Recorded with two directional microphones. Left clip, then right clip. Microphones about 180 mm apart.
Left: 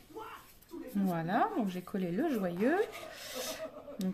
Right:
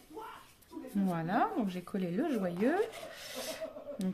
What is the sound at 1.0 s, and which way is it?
A woman's voice, centre (ahead or behind).